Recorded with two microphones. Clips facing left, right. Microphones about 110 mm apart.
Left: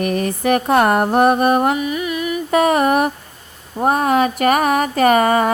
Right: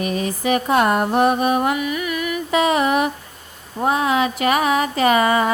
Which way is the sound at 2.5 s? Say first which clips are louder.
Left 3 dB; 50° left (ahead or behind).